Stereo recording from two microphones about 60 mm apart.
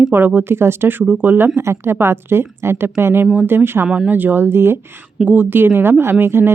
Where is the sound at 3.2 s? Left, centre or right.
Right.